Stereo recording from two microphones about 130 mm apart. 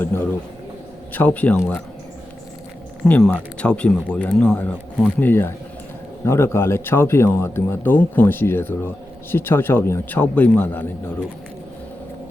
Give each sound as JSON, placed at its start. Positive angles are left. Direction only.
{"t": 0.0, "sound": "speech", "side_deg": 15}
{"t": 3.0, "sound": "speech", "side_deg": 5}